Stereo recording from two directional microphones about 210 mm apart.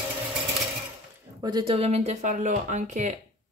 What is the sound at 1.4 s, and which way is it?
Speech, 20° right (ahead or behind).